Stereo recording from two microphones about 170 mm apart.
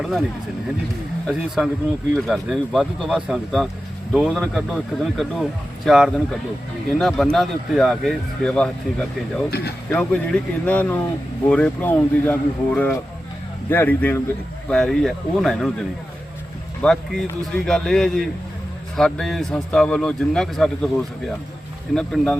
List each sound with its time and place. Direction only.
0.0 s speech: centre (ahead or behind)
1.3 s speech: 5° right (ahead or behind)
9.5 s speech: 70° left (ahead or behind)
9.9 s speech: 5° left (ahead or behind)
16.8 s speech: 5° left (ahead or behind)